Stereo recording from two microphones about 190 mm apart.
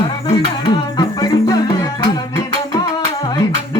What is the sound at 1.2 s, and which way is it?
Music, 20° left (ahead or behind).